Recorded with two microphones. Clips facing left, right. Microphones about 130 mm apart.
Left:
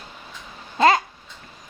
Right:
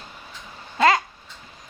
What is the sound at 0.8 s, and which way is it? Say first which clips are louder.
Babbling: left 2 dB; 30° left (ahead or behind).